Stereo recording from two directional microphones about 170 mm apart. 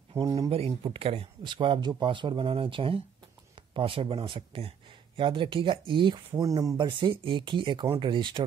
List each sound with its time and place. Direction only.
0.1 s speech: 20° right (ahead or behind)
0.5 s speech: 35° right (ahead or behind)